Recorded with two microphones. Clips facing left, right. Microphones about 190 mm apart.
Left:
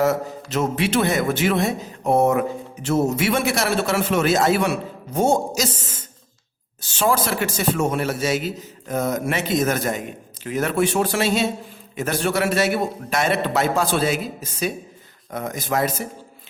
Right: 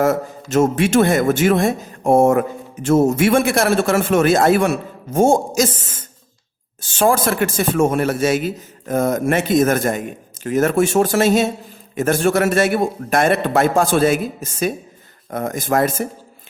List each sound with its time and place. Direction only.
0.0 s a man's voice: 50° right (ahead or behind)